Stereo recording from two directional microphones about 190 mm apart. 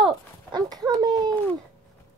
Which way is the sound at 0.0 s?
20° right (ahead or behind).